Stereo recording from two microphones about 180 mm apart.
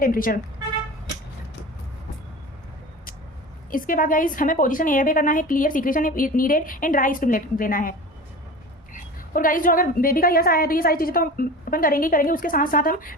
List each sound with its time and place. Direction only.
0.0 s a woman's voice: 50° left (ahead or behind)
3.7 s a woman's voice: 50° left (ahead or behind)